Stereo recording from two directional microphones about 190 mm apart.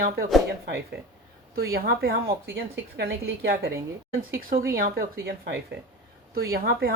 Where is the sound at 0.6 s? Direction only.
55° right (ahead or behind).